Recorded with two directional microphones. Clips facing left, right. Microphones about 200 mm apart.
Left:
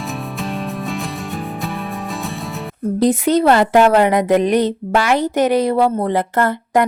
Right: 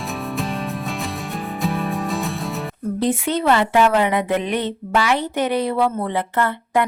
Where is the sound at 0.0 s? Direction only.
Centre (ahead or behind).